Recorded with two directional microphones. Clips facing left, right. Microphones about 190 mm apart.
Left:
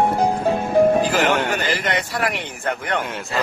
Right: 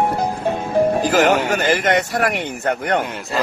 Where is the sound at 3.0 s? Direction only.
Centre (ahead or behind).